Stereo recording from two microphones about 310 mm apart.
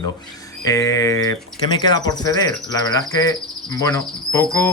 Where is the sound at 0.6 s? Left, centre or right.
Centre.